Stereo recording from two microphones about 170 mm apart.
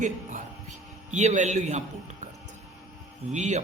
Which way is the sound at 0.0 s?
45° right (ahead or behind).